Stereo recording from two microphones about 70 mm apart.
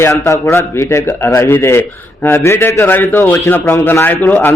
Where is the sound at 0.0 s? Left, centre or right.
Left.